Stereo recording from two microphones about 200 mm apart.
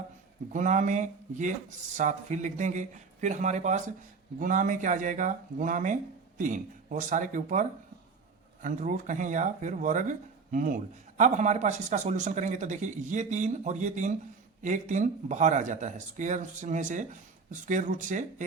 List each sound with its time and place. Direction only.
0.5 s speech: 40° right (ahead or behind)